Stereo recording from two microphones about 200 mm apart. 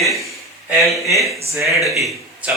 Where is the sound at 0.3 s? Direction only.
15° right (ahead or behind).